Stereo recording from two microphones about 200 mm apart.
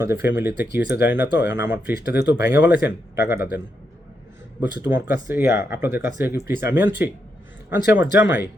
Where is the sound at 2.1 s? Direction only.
55° left (ahead or behind).